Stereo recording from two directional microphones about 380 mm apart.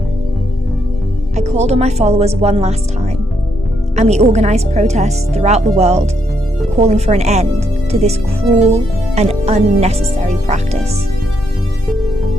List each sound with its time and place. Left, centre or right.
1.4 s speech: centre
8.6 s speech: centre